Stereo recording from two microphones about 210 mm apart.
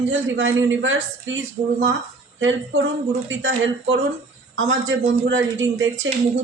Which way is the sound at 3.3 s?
65° right (ahead or behind).